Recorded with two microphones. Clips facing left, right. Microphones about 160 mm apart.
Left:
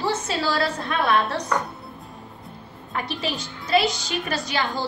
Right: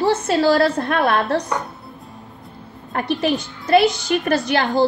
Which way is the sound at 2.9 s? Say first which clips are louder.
Right 8 dB; 55° right (ahead or behind).